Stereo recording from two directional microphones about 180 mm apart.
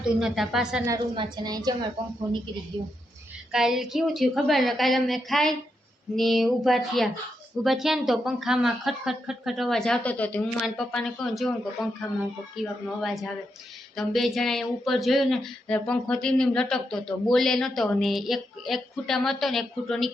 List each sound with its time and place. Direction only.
0.0 s speech: 5° right (ahead or behind)
0.9 s a woman's voice: 25° right (ahead or behind)
2.7 s a woman's voice: 25° right (ahead or behind)
3.5 s speech: centre (ahead or behind)